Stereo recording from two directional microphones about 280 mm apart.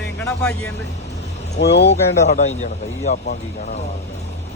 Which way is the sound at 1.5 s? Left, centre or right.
Left.